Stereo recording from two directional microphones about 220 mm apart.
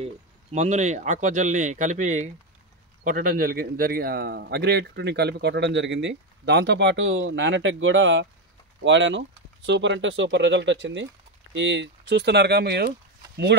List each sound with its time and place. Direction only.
0.0 s speech: 30° right (ahead or behind); by 13.7 s 50° right (ahead or behind)